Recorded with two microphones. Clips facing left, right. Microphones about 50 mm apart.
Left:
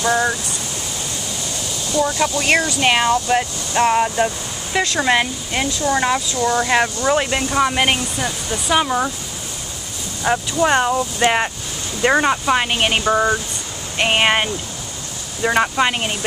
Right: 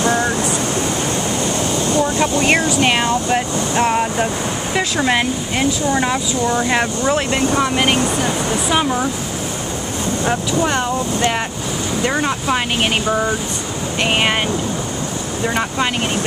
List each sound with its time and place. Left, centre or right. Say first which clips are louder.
1.9 s speech: even; right
2.4 s speech: right 1 dB; centre
2.8 s speech: even; centre
6.4 s speech: even; centre
7.1 s speech: right 1 dB; centre
10.2 s speech: left 2 dB; centre
15.4 s speech: left 3 dB; centre